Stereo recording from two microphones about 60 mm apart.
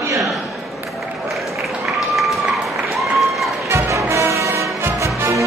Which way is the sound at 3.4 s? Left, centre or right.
Centre.